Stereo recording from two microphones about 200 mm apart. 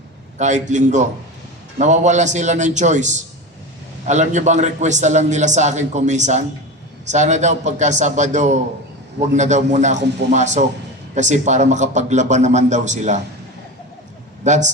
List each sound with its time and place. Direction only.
0.3 s a man's voice: 35° right (ahead or behind)
14.4 s a man's voice: 35° right (ahead or behind)